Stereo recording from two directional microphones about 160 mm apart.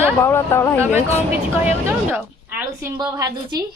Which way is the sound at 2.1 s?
10° right (ahead or behind).